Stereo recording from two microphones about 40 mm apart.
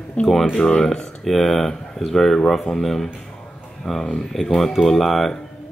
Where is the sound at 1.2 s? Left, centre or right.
Centre.